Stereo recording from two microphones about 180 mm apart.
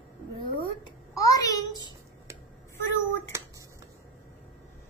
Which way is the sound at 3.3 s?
15° right (ahead or behind).